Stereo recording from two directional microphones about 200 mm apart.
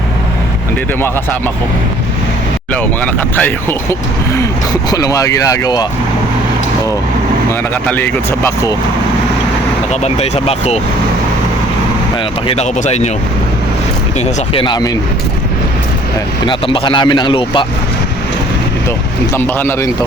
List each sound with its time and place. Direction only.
2.7 s speech: 5° left (ahead or behind)
4.9 s speech: 20° left (ahead or behind)
9.9 s speech: 30° left (ahead or behind)
12.5 s speech: 35° left (ahead or behind)
14.5 s speech: 25° left (ahead or behind)
16.5 s speech: 25° left (ahead or behind)
19.3 s speech: 10° left (ahead or behind)